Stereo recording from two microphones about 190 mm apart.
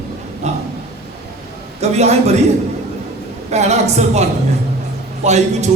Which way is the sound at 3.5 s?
35° right (ahead or behind).